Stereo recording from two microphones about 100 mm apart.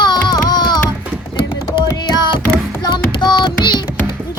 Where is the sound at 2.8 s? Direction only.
45° left (ahead or behind).